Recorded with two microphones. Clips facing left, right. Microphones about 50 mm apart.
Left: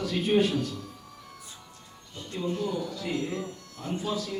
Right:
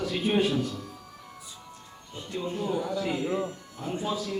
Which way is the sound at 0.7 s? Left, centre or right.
Centre.